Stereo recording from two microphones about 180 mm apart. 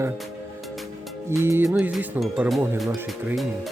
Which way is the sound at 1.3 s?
15° right (ahead or behind).